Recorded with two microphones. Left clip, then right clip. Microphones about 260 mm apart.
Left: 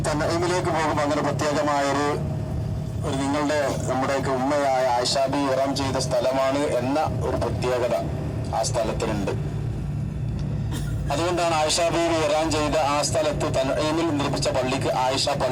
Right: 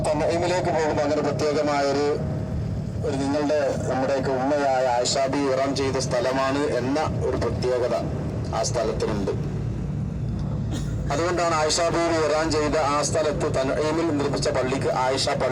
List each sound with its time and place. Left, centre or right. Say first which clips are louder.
0.3 s a sound: right 1 dB; left
3.1 s speech: right 1 dB; left
11.1 s a man's voice: even; left
11.7 s speech: even; left